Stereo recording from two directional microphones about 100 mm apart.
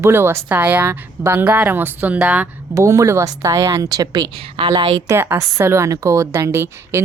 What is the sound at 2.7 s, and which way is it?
A woman's voice, 35° right (ahead or behind).